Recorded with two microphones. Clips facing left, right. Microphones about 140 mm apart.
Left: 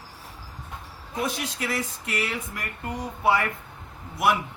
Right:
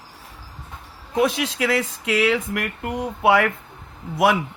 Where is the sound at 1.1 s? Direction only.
90° right.